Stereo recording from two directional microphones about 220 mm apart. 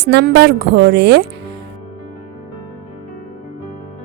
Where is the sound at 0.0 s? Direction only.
50° right (ahead or behind).